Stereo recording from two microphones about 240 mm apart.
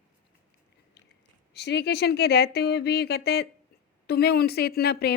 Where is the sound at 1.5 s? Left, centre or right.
Left.